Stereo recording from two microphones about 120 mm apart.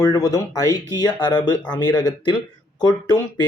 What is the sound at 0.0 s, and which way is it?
Speech, 25° left (ahead or behind).